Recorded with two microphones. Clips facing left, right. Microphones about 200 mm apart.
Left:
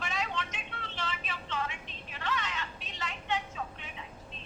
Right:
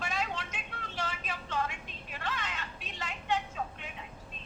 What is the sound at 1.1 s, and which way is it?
Vehicle, 50° right (ahead or behind).